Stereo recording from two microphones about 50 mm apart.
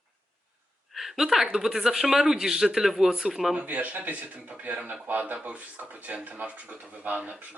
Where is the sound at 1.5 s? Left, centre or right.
Centre.